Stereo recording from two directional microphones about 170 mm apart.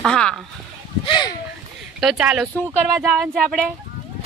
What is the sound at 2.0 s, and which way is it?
Speech, 5° right (ahead or behind).